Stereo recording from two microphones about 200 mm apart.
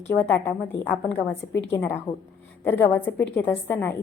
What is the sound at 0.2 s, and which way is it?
A woman's voice, 10° left (ahead or behind).